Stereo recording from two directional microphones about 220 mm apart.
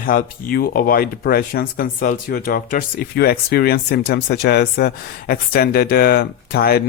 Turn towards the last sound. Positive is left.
turn(degrees=45)  # may be behind; listen again after turning